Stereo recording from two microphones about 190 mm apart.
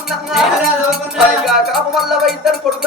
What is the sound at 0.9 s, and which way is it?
Music, centre (ahead or behind).